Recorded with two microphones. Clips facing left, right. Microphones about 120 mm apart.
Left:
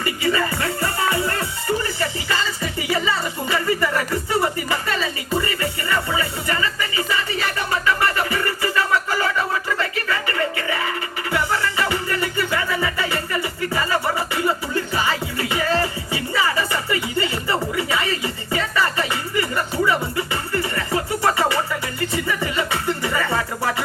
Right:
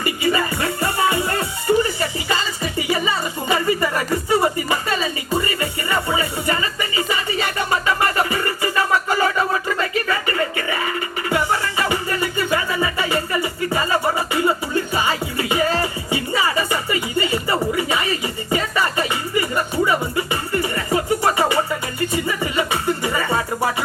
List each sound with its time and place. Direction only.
0.0 s music: 20° right (ahead or behind)